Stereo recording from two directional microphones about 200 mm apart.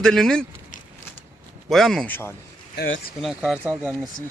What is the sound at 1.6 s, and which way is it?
Speech, centre (ahead or behind).